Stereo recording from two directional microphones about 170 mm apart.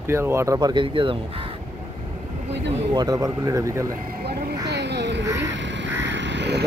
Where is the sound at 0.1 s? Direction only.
15° right (ahead or behind).